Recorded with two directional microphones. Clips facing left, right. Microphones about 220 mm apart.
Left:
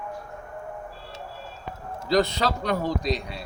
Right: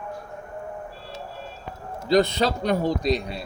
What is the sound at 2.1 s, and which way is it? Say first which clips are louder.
Speech: right 3 dB; 25° right (ahead or behind).